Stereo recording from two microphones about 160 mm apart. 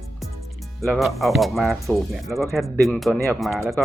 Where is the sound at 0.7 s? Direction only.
Centre (ahead or behind).